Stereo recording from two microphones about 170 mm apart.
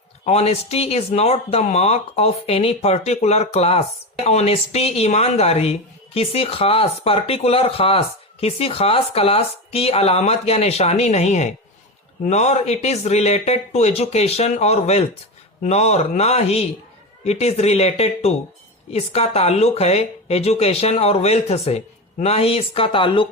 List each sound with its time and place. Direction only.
0.3 s speech: 40° left (ahead or behind)